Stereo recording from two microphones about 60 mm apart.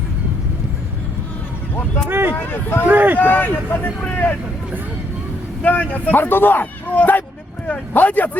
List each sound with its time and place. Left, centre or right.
2.0 s speech: right
2.3 s speech: left
2.8 s speech: right
3.2 s speech: left
5.6 s speech: left